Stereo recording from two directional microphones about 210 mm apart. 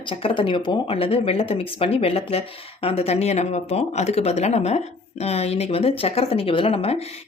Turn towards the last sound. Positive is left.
turn(degrees=30)  # may be behind; listen again after turning